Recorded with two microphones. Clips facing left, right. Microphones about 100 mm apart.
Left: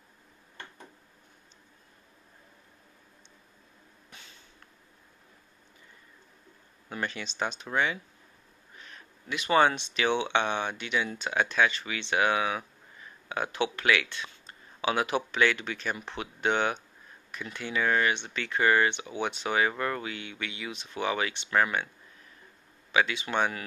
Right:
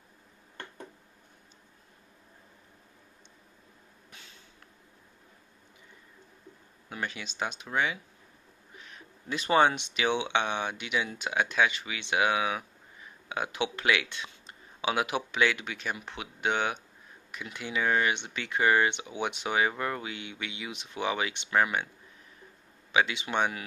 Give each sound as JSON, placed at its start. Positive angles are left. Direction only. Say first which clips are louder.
{"t": 6.9, "sound": "speech", "louder": "left 2 dB", "side_deg": -5}
{"t": 8.7, "sound": "a sound", "louder": "even", "side_deg": -10}
{"t": 9.5, "sound": "speech", "louder": "even", "side_deg": -20}
{"t": 22.8, "sound": "speech", "louder": "even", "side_deg": -20}